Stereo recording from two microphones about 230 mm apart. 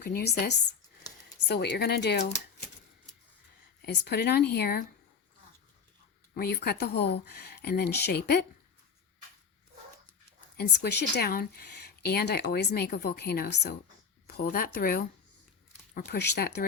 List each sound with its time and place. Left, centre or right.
0.0 s a woman's voice: left
3.8 s a woman's voice: left
6.3 s a woman's voice: left
10.6 s a woman's voice: left